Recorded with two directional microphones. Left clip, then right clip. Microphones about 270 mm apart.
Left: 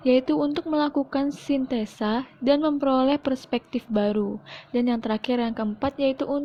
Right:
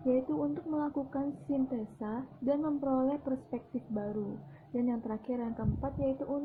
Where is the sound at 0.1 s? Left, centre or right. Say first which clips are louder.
Left 10 dB; left.